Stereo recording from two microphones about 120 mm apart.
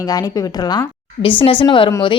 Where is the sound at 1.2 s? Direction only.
45° left (ahead or behind).